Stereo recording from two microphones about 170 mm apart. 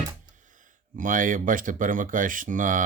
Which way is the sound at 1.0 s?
50° right (ahead or behind).